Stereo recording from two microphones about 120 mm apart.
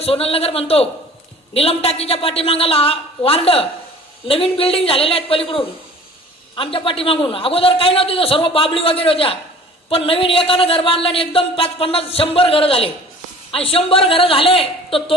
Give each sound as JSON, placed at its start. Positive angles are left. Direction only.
{"t": 0.0, "sound": "a man's voice", "side_deg": 55}